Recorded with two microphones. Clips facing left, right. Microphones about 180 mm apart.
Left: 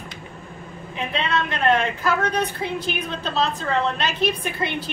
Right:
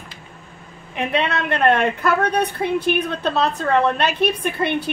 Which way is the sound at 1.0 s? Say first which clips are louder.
Right 3 dB; 65° right (ahead or behind).